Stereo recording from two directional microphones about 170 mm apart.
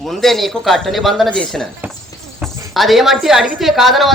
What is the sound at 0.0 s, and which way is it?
A woman's voice, centre (ahead or behind).